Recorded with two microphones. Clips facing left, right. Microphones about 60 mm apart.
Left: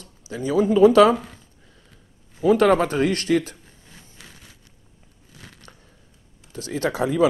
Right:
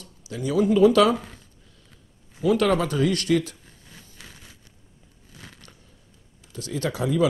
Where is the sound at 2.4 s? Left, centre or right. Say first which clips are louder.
Left 4 dB; left.